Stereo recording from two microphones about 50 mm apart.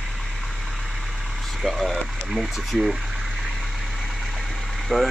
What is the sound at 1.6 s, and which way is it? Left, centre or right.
Speech, centre.